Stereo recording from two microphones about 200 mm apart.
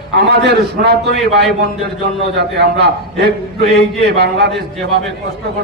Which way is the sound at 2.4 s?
55° right (ahead or behind).